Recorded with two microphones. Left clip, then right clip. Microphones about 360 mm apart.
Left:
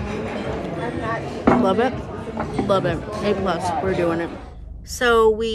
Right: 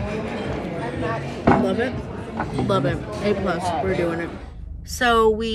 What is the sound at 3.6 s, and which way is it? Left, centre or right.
Speech, centre.